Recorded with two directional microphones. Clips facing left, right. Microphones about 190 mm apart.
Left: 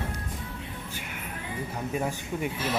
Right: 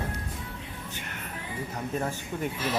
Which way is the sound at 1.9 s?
10° left (ahead or behind).